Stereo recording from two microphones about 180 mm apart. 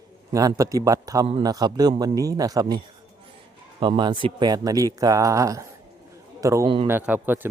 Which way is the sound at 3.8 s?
25° right (ahead or behind).